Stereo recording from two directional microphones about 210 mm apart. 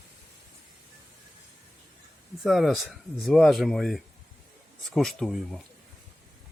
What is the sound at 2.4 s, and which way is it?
Speech, centre (ahead or behind).